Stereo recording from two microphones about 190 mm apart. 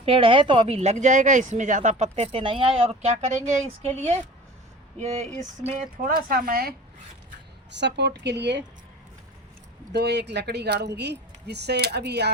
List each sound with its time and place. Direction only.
0.0 s speech: 30° right (ahead or behind)
6.2 s speech: 50° right (ahead or behind)
7.7 s speech: 65° right (ahead or behind)
9.9 s speech: 60° right (ahead or behind)